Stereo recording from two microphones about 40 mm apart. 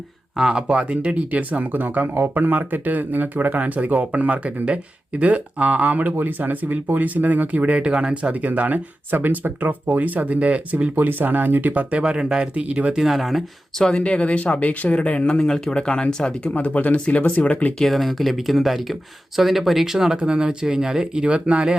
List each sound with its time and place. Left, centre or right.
0.3 s speech: centre; by 7.8 s right
7.8 s speech: right
8.1 s speech: right
10.2 s speech: right
10.9 s speech: right
12.0 s speech: right
12.6 s speech: right
13.0 s speech: centre
13.9 s speech: left
16.4 s speech: left
17.7 s speech: centre
20.1 s speech: right
21.2 s speech: right